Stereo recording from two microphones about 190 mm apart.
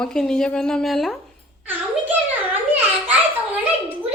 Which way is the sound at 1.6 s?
10° right (ahead or behind).